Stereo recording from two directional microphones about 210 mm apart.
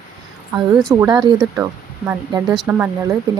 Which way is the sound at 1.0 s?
20° right (ahead or behind).